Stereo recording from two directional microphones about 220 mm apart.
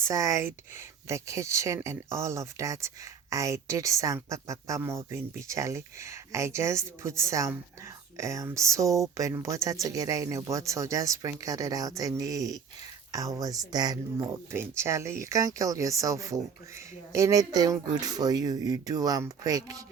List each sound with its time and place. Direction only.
0.1 s speech: 15° right (ahead or behind)